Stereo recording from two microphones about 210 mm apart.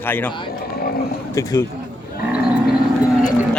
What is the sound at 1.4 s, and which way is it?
Speech, 15° left (ahead or behind).